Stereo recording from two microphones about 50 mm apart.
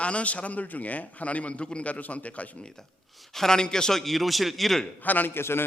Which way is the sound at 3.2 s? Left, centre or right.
Centre.